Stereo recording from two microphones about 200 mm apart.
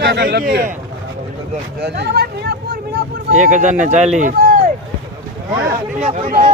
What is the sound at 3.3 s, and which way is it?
Speech, 40° right (ahead or behind).